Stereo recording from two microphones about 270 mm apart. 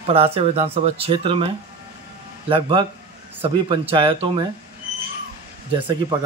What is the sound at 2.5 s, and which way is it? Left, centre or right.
Speech, centre.